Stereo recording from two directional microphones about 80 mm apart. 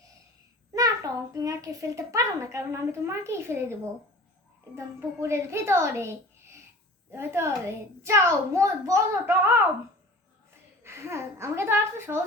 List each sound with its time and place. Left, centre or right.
0.7 s a child's voice: right
10.8 s a child's voice: right